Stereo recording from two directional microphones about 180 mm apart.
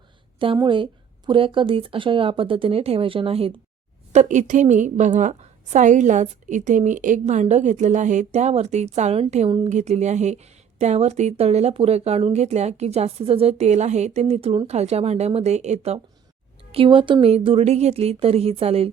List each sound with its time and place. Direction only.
0.3 s speech: 25° right (ahead or behind)